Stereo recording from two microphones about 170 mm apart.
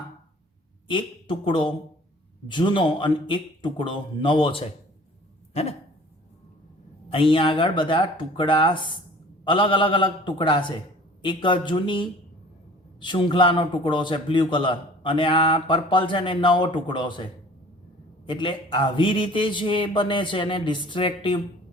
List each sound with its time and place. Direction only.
0.9 s a man's voice: 30° left (ahead or behind)
7.1 s a man's voice: 30° left (ahead or behind)
18.3 s a man's voice: 30° left (ahead or behind)